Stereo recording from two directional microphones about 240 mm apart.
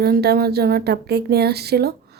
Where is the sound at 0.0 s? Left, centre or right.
Right.